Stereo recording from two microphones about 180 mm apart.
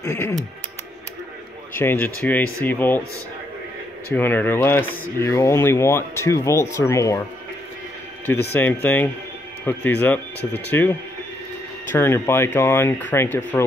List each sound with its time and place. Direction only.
0.0 s speech: 15° left (ahead or behind)
1.7 s speech: 10° left (ahead or behind)
4.1 s speech: 10° left (ahead or behind)
8.5 s speech: 10° left (ahead or behind)